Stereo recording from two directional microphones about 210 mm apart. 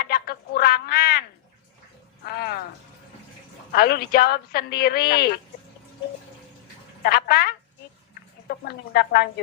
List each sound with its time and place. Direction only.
0.0 s a sound: 45° left (ahead or behind)
2.2 s music: 45° left (ahead or behind)
3.7 s a woman's voice: 45° left (ahead or behind)
7.0 s a woman's voice: 45° left (ahead or behind)